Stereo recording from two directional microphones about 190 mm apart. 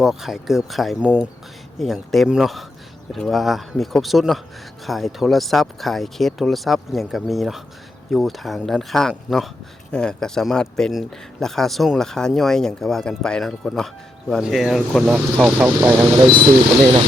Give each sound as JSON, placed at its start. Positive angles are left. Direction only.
{"t": 0.0, "sound": "speech", "side_deg": 0}